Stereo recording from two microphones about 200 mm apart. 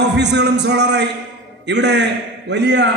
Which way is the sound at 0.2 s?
60° right (ahead or behind).